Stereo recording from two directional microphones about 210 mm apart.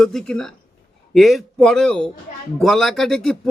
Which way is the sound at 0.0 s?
5° left (ahead or behind).